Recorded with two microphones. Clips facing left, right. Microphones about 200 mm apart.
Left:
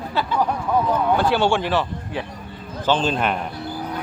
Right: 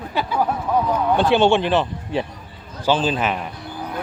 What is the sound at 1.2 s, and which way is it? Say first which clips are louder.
Speech: right 3 dB; 20° right (ahead or behind).